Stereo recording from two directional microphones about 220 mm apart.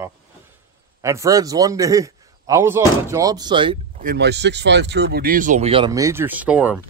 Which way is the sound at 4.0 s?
45° right (ahead or behind).